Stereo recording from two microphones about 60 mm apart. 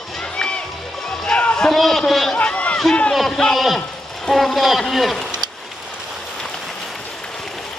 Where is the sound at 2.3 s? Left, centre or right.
Left; by 3.8 s centre.